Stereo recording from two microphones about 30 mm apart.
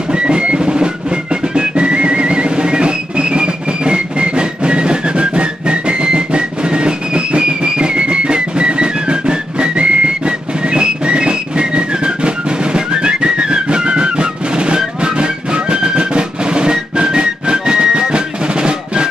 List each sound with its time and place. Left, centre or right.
0.1 s music: right